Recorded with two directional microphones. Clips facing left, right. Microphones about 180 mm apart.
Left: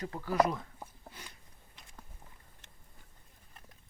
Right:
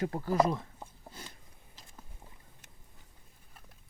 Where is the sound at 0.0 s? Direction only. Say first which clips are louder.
Right 2 dB; 35° right (ahead or behind).